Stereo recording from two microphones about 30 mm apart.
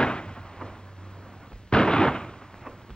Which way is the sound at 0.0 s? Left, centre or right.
Left.